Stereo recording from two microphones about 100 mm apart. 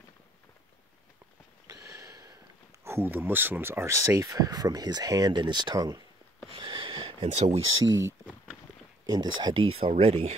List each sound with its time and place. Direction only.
1.7 s sniff: 35° right (ahead or behind)
2.8 s speech: 25° right (ahead or behind)
6.5 s a sound: 55° right (ahead or behind); by 7.6 s 85° right
7.8 s speech: 35° right (ahead or behind)
9.5 s speech: 80° right